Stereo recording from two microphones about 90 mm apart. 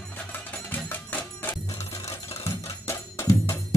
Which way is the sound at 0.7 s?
20° left (ahead or behind).